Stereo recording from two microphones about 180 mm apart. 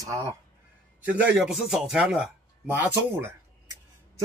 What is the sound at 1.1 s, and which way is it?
A man's voice, 5° right (ahead or behind).